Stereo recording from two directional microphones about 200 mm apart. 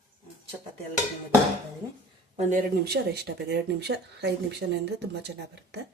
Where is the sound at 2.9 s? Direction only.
55° right (ahead or behind).